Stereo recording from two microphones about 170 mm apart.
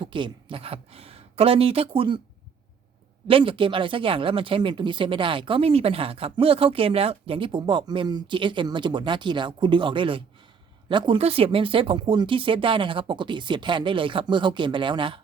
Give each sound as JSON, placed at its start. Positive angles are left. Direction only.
{"t": 0.0, "sound": "speech", "side_deg": -30}
{"t": 3.2, "sound": "speech", "side_deg": -30}